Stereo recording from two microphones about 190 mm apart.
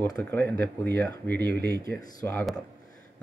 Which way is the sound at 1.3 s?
60° right (ahead or behind).